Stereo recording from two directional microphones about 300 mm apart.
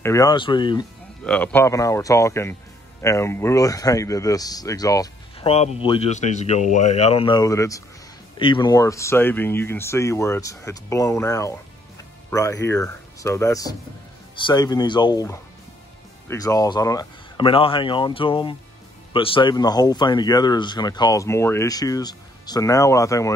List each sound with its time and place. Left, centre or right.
0.0 s speech: centre
1.2 s speech: centre